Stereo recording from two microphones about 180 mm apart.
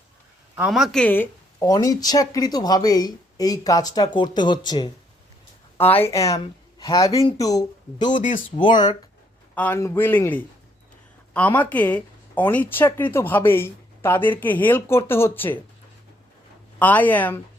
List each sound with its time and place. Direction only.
0.5 s speech: 5° right (ahead or behind); by 4.9 s 25° left (ahead or behind)
6.1 s speech: 15° left (ahead or behind)
7.1 s speech: 30° left (ahead or behind)
7.3 s speech: 20° left (ahead or behind)
8.1 s speech: 45° left (ahead or behind)
8.5 s speech: 25° left (ahead or behind)
9.6 s speech: 10° left (ahead or behind)
16.7 s speech: 10° left (ahead or behind)